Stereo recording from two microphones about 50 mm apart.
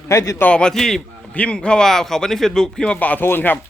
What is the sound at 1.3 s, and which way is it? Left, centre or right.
Speech, left.